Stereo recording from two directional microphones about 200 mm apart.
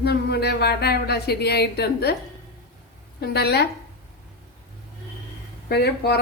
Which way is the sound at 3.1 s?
50° left (ahead or behind).